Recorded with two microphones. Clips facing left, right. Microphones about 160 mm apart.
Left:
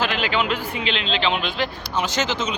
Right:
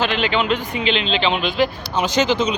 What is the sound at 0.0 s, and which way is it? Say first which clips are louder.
Speech: right 3 dB; 5° left (ahead or behind).